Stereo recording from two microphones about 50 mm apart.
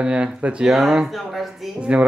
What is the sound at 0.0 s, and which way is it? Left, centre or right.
Speech, right.